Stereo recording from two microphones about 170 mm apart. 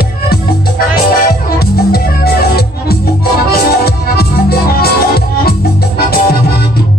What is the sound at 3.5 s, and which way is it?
Music, 65° left (ahead or behind).